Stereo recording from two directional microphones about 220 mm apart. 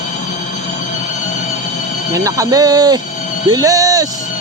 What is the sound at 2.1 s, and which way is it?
Speech, 15° right (ahead or behind).